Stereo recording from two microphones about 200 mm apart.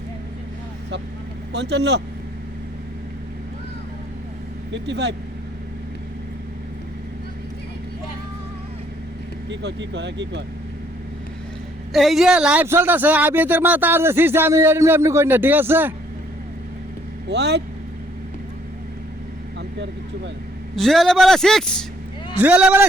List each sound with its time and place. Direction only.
1.5 s speech: 60° right (ahead or behind)
4.7 s speech: 60° right (ahead or behind)
9.5 s speech: 60° right (ahead or behind)
11.9 s a man's voice: centre (ahead or behind)
17.2 s speech: 60° right (ahead or behind)
20.7 s a man's voice: centre (ahead or behind)